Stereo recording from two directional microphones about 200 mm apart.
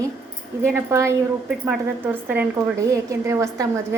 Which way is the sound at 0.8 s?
15° right (ahead or behind).